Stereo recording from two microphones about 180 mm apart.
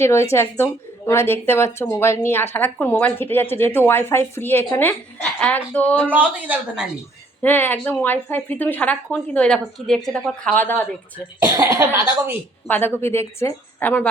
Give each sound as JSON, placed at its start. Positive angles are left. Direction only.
{"t": 0.0, "sound": "speech", "side_deg": 15}
{"t": 6.1, "sound": "speech", "side_deg": -10}
{"t": 7.4, "sound": "speech", "side_deg": 10}
{"t": 11.4, "sound": "cough", "side_deg": -20}
{"t": 12.6, "sound": "speech", "side_deg": 10}